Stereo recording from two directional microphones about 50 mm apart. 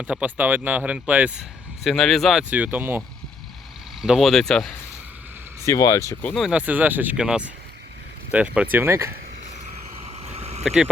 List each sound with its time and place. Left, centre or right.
0.0 s speech: right
0.8 s speech: right
1.8 s speech: centre
2.5 s speech: right
4.2 s speech: centre
5.6 s speech: left
6.5 s speech: right
7.2 s speech: centre
8.3 s speech: right
8.6 s speech: right
8.9 s speech: right
10.6 s speech: centre